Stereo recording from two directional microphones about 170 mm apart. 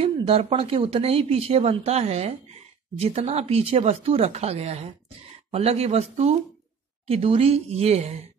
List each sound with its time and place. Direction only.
0.0 s a woman's voice: 35° right (ahead or behind)